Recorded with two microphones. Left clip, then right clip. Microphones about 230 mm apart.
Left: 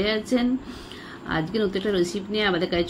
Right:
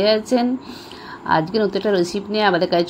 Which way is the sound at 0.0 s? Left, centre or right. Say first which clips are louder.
Right 7 dB; centre.